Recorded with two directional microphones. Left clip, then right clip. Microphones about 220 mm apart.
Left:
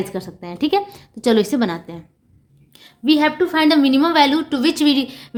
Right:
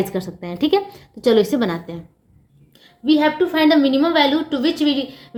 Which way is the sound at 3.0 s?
25° left (ahead or behind).